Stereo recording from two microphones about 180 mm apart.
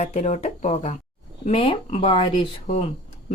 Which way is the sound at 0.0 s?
35° left (ahead or behind).